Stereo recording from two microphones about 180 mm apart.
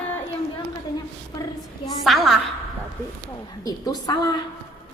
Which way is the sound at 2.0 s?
Centre (ahead or behind).